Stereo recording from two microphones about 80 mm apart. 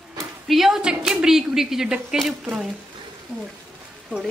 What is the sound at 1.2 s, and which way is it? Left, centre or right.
Speech, centre.